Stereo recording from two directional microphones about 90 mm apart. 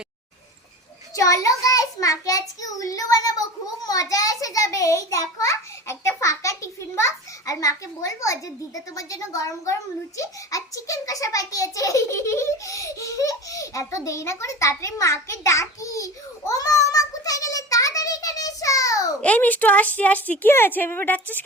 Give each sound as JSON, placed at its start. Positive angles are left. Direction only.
{"t": 1.1, "sound": "a child's voice", "side_deg": 40}
{"t": 16.5, "sound": "a sound", "side_deg": 40}
{"t": 19.2, "sound": "a woman's voice", "side_deg": 15}